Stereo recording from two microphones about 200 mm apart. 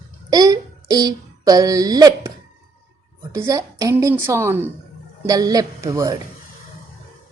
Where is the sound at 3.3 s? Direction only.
15° right (ahead or behind).